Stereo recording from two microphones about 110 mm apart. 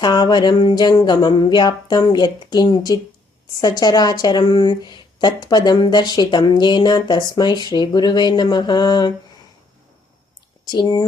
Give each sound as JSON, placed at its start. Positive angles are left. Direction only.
{"t": 0.0, "sound": "a woman's voice", "side_deg": 40}
{"t": 10.7, "sound": "a woman's voice", "side_deg": 40}